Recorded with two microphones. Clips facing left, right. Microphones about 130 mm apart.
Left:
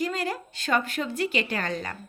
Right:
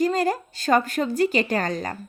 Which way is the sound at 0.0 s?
40° right (ahead or behind).